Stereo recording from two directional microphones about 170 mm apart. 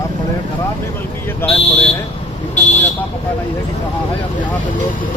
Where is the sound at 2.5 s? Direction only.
45° left (ahead or behind).